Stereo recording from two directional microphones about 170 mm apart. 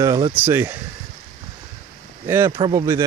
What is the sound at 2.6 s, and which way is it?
Speech, 30° right (ahead or behind).